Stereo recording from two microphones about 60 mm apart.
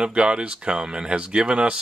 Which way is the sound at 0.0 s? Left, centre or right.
Centre.